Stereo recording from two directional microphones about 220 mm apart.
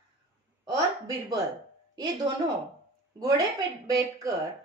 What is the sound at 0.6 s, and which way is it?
Speech, 15° right (ahead or behind).